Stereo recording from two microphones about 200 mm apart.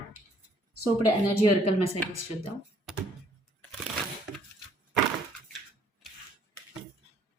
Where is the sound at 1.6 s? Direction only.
30° left (ahead or behind).